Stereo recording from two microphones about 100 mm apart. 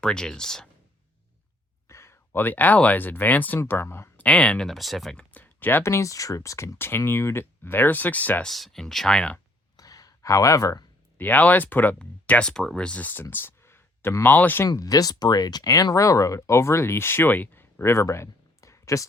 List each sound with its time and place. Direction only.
0.0 s speech: 5° left (ahead or behind)
1.9 s speech: 25° left (ahead or behind)
3.6 s speech: 25° left (ahead or behind)
4.2 s speech: 10° left (ahead or behind)
5.3 s speech: 20° left (ahead or behind)
8.4 s speech: centre (ahead or behind)
9.7 s a sound: 40° left (ahead or behind)
11.2 s speech: 15° left (ahead or behind)
13.3 s a sound: 25° left (ahead or behind)
14.6 s speech: 35° left (ahead or behind)